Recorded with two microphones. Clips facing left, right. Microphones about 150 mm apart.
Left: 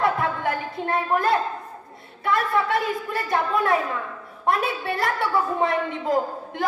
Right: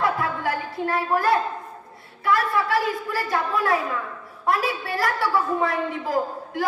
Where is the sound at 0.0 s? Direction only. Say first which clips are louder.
Left 1 dB; 25° left (ahead or behind).